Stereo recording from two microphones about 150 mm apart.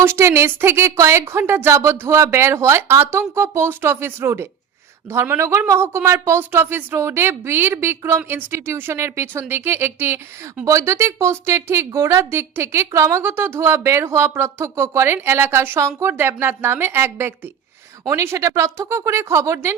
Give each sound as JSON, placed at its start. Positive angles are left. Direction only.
{"t": 0.0, "sound": "a woman's voice", "side_deg": -15}